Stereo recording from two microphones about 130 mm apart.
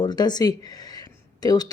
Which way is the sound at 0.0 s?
35° left (ahead or behind).